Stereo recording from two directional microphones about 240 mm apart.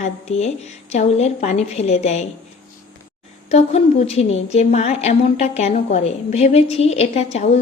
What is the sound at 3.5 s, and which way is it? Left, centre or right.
A woman's voice, left.